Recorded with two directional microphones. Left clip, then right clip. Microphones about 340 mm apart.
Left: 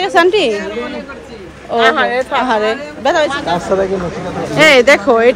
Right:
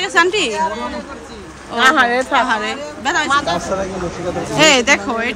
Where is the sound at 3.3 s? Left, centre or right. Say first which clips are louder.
Right 1 dB; right.